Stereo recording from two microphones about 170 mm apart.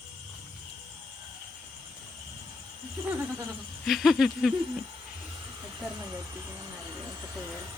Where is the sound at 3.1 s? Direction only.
10° right (ahead or behind).